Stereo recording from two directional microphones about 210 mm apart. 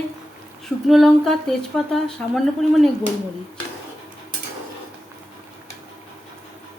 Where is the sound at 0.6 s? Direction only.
Centre (ahead or behind).